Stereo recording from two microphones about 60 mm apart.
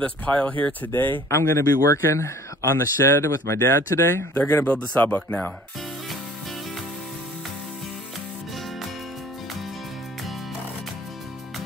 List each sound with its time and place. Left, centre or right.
0.0 s speech: left
1.3 s speech: left
4.3 s speech: left